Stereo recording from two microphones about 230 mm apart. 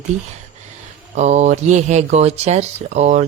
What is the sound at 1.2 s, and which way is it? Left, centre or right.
Speech, right.